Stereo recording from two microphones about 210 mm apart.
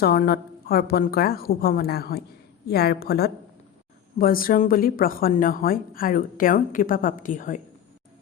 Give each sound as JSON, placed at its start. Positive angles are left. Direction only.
{"t": 0.0, "sound": "a woman's voice", "side_deg": 45}